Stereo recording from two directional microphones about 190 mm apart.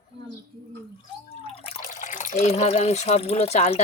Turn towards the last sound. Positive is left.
turn(degrees=35)  # may be behind; listen again after turning